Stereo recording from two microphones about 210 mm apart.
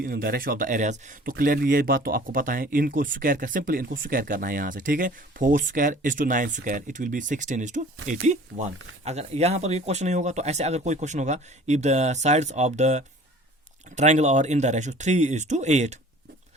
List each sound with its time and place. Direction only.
0.0 s speech: 45° right (ahead or behind)